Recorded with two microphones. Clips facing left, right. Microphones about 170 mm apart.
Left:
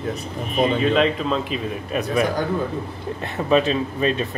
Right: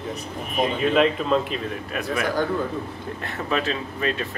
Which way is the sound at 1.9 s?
20° left (ahead or behind).